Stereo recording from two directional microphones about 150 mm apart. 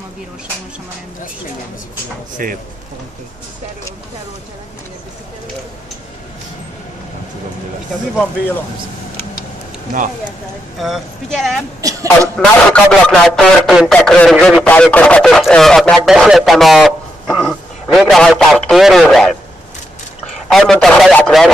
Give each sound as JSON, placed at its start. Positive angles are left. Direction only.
{"t": 2.3, "sound": "speech", "side_deg": -65}
{"t": 10.8, "sound": "speech", "side_deg": 0}
{"t": 11.8, "sound": "speech", "side_deg": -20}
{"t": 12.4, "sound": "speech", "side_deg": 5}
{"t": 20.5, "sound": "speech", "side_deg": 0}